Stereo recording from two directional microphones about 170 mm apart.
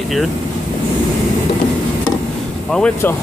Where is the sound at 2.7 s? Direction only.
10° left (ahead or behind).